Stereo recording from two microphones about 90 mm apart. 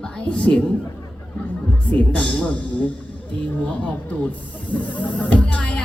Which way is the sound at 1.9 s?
15° left (ahead or behind).